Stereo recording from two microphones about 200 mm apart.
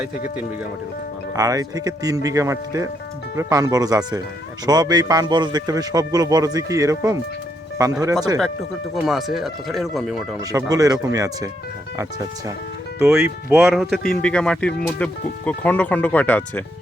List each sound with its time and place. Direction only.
1.4 s speech: 15° right (ahead or behind)
9.0 s speech: centre (ahead or behind)
10.5 s speech: 15° right (ahead or behind)
13.1 s speech: centre (ahead or behind)